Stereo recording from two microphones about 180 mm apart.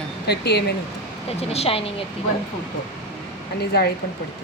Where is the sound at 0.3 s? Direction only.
65° left (ahead or behind).